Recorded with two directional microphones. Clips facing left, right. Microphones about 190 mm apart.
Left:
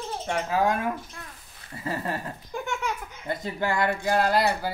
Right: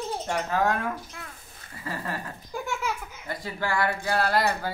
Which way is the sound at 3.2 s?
20° left (ahead or behind).